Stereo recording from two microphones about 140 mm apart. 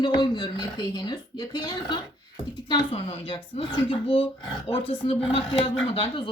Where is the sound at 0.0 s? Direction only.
35° left (ahead or behind).